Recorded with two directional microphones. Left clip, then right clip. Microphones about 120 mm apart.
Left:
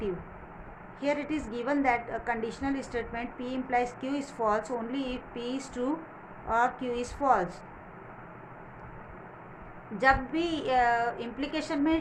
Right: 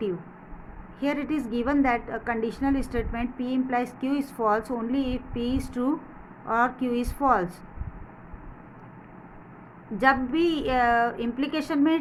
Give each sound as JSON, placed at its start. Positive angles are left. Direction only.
{"t": 0.9, "sound": "a woman's voice", "side_deg": -55}
{"t": 10.0, "sound": "a woman's voice", "side_deg": -60}